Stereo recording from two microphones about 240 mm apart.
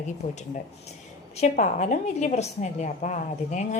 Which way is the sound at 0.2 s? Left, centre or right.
Left.